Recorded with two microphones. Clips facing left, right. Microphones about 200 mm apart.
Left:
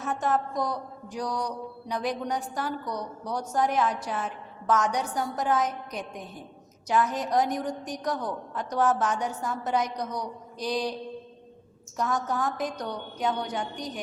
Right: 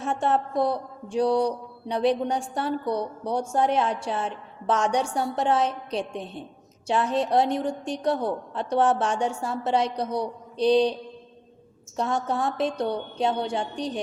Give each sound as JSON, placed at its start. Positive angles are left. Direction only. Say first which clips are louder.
{"t": 0.0, "sound": "mantra", "louder": "right 3 dB", "side_deg": -30}
{"t": 11.9, "sound": "mantra", "louder": "right 2 dB", "side_deg": -30}